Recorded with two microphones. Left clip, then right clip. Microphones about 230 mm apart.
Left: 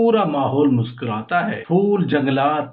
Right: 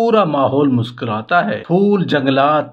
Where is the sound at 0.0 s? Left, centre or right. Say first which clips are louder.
Right 4 dB; right.